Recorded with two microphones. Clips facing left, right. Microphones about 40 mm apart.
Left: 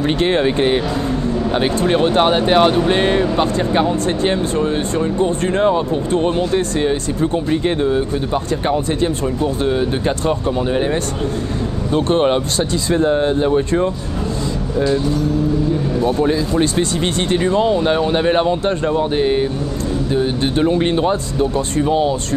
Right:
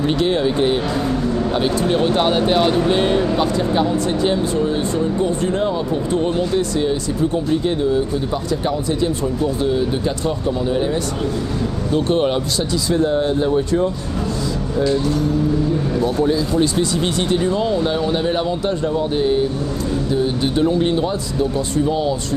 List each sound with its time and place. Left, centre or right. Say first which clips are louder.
0.2 s speech: left 3 dB; left
2.0 s speech: left 4 dB; left
4.2 s speech: left 1 dB; left
8.6 s speech: left 2 dB; left
12.1 s speech: left 4 dB; left
17.3 s speech: left 5 dB; left
20.2 s speech: left 2 dB; left